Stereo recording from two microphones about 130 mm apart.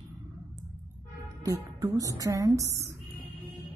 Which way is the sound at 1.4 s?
25° right (ahead or behind).